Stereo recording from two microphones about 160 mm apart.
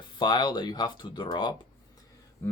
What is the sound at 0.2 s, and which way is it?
Speech, 30° left (ahead or behind).